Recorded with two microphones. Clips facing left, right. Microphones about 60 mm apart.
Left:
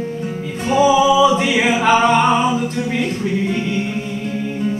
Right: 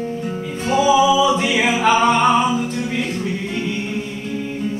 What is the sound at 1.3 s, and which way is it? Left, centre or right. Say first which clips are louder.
Music: left 2 dB; centre.